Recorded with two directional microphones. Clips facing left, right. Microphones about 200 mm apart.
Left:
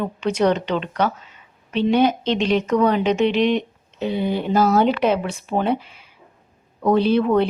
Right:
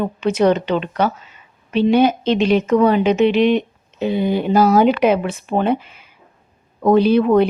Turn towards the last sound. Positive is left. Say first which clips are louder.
# right 4 dB
turn(degrees=-10)  # may be behind; listen again after turning